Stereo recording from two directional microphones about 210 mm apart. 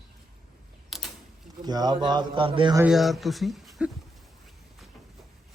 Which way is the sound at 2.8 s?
Centre (ahead or behind).